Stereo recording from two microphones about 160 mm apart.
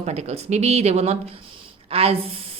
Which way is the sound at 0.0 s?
45° right (ahead or behind).